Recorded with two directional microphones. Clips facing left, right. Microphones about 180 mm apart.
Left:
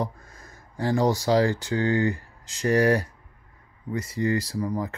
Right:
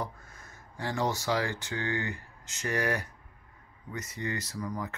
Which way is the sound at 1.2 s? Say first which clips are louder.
Left 9 dB; 35° left (ahead or behind).